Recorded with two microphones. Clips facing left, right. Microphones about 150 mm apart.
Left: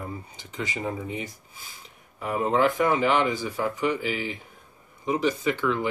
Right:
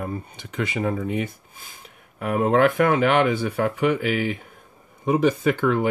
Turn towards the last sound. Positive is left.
turn(degrees=-50)  # may be behind; listen again after turning